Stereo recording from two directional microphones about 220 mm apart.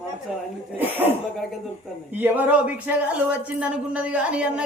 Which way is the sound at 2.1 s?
10° right (ahead or behind).